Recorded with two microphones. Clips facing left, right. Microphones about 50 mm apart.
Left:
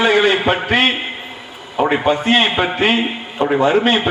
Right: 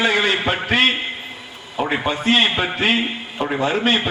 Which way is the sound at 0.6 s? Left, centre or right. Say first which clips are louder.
Left 2 dB; left.